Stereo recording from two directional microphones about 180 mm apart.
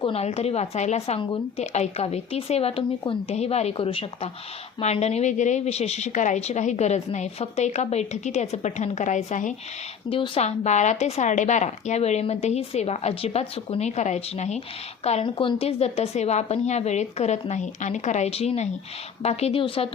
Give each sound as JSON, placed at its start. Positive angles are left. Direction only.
{"t": 0.0, "sound": "a woman's voice", "side_deg": 35}
{"t": 10.1, "sound": "a woman's voice", "side_deg": 30}